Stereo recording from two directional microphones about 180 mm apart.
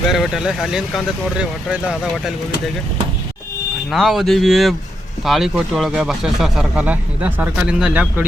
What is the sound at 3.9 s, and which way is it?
Speech, centre (ahead or behind).